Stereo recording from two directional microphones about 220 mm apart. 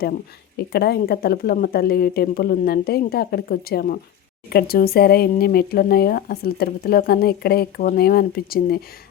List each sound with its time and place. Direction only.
0.7 s speech: 45° left (ahead or behind)